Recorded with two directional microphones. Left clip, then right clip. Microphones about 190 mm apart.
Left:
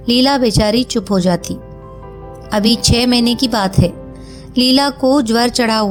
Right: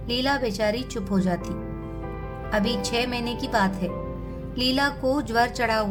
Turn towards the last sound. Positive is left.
turn(degrees=40)  # may be behind; listen again after turning